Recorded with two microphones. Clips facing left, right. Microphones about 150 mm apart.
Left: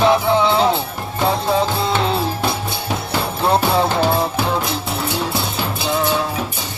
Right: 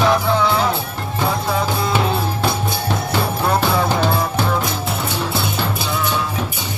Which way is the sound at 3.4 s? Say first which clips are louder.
Left 3 dB; 25° left (ahead or behind).